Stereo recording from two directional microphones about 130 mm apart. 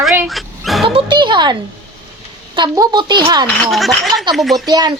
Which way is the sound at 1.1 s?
35° right (ahead or behind).